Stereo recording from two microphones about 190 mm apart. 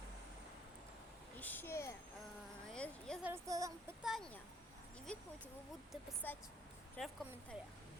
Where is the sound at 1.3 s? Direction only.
10° left (ahead or behind).